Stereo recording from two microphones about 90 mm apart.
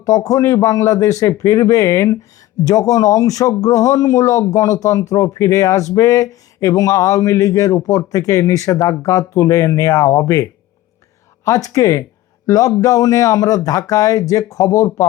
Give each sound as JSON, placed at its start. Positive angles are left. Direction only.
{"t": 0.0, "sound": "speech", "side_deg": 40}